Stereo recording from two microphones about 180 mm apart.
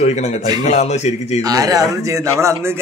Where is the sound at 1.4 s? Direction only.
20° right (ahead or behind).